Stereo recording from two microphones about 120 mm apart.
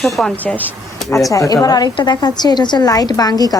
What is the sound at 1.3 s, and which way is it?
A woman's voice, 30° left (ahead or behind).